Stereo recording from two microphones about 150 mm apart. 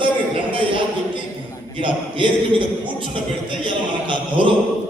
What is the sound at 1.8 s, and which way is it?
Music, 35° right (ahead or behind).